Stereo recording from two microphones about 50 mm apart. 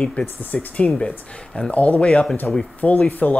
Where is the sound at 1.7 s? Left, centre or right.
Left.